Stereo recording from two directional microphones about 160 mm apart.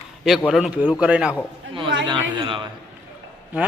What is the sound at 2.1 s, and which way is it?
Speech, 30° right (ahead or behind).